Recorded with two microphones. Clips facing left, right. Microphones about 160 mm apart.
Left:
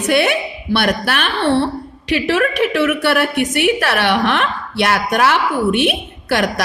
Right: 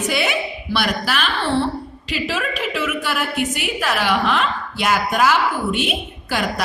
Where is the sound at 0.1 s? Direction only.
60° left (ahead or behind).